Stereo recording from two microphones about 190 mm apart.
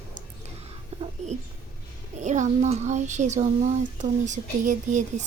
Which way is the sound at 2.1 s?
40° right (ahead or behind).